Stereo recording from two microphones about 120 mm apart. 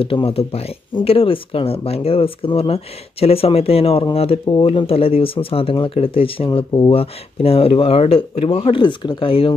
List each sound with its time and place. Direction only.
0.0 s speech: 50° left (ahead or behind)